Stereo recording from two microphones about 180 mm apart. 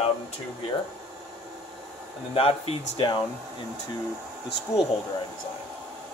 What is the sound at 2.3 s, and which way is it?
Speech, 30° left (ahead or behind).